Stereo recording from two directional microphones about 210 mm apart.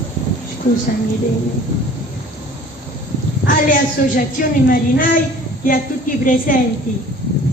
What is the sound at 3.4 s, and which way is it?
A woman's voice, 40° left (ahead or behind).